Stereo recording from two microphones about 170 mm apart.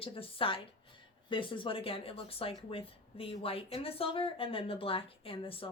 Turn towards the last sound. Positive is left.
turn(degrees=35)  # may be behind; listen again after turning